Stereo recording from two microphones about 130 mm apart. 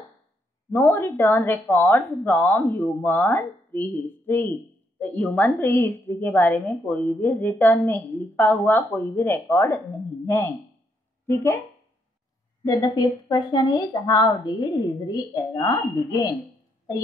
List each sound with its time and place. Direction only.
0.7 s speech: 20° left (ahead or behind)
12.6 s a woman's voice: 30° left (ahead or behind)